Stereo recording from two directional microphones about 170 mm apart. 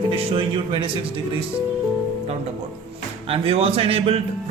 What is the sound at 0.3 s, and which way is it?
Speech, 30° right (ahead or behind).